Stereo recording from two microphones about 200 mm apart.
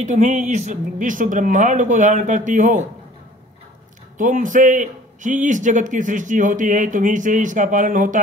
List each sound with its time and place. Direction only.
0.0 s a man's voice: 35° right (ahead or behind)
4.2 s a man's voice: 40° right (ahead or behind)